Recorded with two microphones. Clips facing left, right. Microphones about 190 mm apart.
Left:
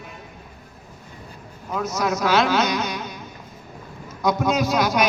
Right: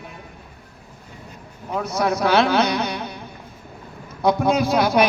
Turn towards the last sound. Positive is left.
turn(degrees=-30)  # may be behind; listen again after turning